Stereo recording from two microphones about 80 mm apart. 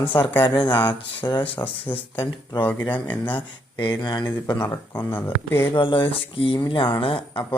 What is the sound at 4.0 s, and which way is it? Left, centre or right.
Speech, left.